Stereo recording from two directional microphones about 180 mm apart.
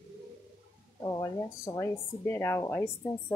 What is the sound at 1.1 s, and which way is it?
A woman's voice, 20° left (ahead or behind).